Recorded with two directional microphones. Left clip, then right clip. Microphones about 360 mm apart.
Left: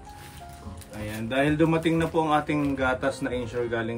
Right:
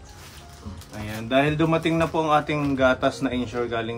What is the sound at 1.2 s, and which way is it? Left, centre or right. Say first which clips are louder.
Speech: right 2 dB; centre.